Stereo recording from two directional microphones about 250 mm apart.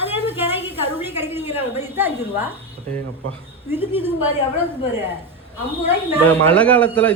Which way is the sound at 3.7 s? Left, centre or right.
Centre.